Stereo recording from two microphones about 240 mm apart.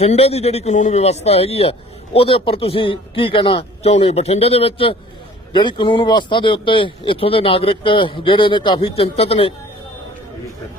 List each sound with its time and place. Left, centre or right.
0.0 s speech: left